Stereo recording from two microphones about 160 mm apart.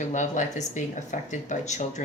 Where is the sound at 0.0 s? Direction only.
50° left (ahead or behind).